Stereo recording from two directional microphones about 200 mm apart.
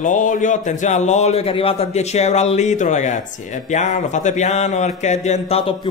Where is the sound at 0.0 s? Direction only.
40° left (ahead or behind).